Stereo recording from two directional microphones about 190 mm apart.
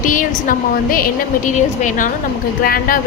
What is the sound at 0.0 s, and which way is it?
A woman's voice, 45° left (ahead or behind).